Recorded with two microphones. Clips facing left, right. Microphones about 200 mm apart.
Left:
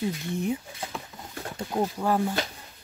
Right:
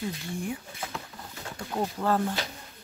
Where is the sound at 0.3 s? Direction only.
20° left (ahead or behind).